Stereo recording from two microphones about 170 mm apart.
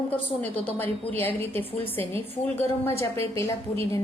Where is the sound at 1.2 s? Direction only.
10° left (ahead or behind).